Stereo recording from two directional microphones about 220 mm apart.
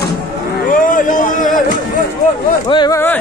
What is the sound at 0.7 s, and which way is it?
Speech, 35° left (ahead or behind).